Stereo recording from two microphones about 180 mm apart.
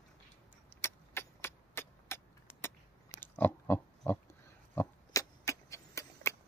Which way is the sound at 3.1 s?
10° left (ahead or behind).